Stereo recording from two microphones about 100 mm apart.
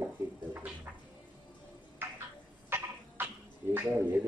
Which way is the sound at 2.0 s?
20° right (ahead or behind).